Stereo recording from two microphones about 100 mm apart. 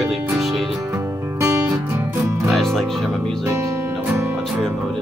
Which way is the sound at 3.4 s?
15° right (ahead or behind).